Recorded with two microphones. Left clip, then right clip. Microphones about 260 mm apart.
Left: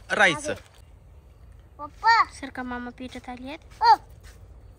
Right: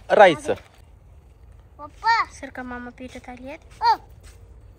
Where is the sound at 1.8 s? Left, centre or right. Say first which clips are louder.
Left 1 dB; centre.